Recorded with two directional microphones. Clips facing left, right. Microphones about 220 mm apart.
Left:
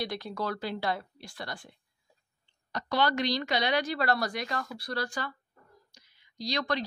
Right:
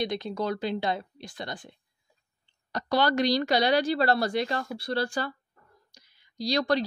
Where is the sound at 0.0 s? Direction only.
20° right (ahead or behind).